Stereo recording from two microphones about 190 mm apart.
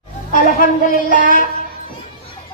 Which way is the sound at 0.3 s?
45° left (ahead or behind).